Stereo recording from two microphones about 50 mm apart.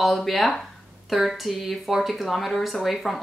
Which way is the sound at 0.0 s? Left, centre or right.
Centre.